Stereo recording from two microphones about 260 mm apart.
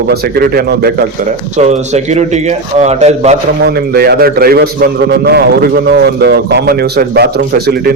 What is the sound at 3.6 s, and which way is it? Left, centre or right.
A man's voice, right.